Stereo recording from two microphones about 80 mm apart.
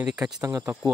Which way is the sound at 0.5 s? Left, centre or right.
Right.